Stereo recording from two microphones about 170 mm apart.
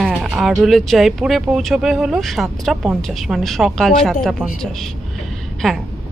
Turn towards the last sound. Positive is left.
turn(degrees=0)  # may be behind; listen again after turning